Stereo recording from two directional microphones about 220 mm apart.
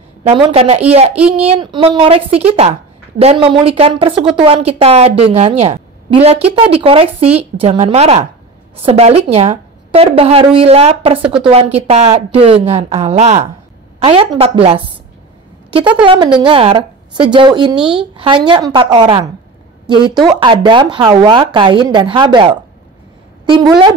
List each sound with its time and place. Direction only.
0.2 s a woman's voice: 25° right (ahead or behind)
16.0 s a woman's voice: 20° right (ahead or behind)